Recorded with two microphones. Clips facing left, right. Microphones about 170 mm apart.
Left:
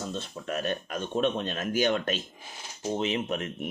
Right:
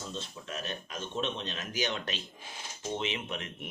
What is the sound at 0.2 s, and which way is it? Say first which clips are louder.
Speech: left 7 dB; 60° left (ahead or behind).